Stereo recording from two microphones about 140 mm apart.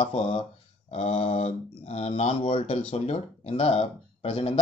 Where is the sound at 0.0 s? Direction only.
45° left (ahead or behind).